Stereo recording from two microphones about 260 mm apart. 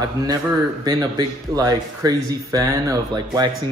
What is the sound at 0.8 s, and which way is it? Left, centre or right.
Speech, centre.